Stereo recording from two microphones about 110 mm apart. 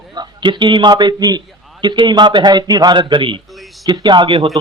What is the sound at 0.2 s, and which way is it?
A man's voice, 45° right (ahead or behind).